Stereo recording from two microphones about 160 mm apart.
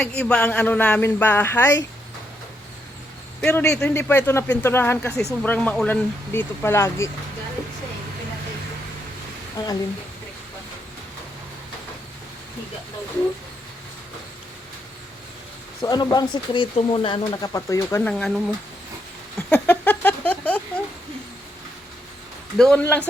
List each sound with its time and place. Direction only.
0.0 s speech: 5° left (ahead or behind)
3.4 s speech: 15° left (ahead or behind)
9.6 s speech: 25° left (ahead or behind)
15.8 s speech: 25° left (ahead or behind)
19.4 s a sound: 10° left (ahead or behind)
22.5 s speech: 5° left (ahead or behind)